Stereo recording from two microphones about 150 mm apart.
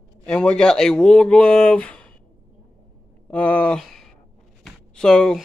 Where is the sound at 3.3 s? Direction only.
10° left (ahead or behind).